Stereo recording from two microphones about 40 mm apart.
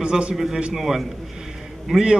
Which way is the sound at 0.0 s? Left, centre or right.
Right.